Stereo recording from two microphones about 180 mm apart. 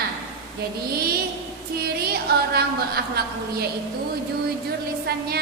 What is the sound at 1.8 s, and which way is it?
Speech, 60° right (ahead or behind).